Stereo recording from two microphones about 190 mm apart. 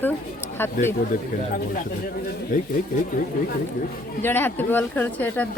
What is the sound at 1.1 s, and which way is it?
Speech, 45° left (ahead or behind).